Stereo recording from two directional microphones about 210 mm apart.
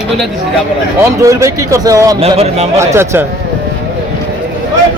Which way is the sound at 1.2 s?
15° right (ahead or behind).